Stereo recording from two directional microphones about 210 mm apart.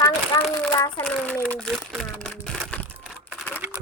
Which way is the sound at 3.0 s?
5° right (ahead or behind).